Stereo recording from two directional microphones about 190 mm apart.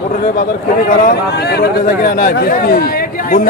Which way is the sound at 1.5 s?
55° left (ahead or behind).